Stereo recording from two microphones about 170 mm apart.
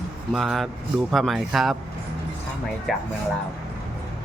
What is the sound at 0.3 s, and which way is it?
Speech, centre (ahead or behind).